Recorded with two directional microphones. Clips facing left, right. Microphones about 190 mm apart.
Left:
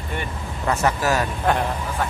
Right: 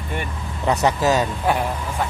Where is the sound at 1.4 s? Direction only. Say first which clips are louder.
Even; 10° right (ahead or behind).